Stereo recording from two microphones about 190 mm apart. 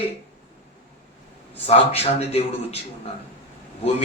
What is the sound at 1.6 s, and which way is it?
Mantra, 30° left (ahead or behind).